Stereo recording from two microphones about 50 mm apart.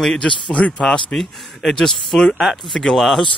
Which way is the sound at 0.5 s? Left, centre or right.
Left.